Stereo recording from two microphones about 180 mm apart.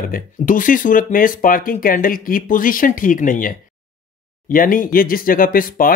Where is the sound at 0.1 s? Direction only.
50° left (ahead or behind).